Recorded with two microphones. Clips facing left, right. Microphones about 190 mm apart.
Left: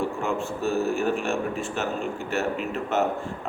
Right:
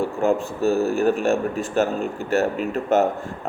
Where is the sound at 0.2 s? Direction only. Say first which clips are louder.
Right 7 dB; 35° right (ahead or behind).